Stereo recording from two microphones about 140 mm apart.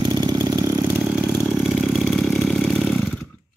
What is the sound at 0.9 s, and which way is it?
Vehicle, 5° right (ahead or behind).